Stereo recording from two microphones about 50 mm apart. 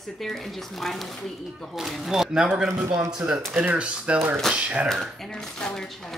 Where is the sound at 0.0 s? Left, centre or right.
Centre.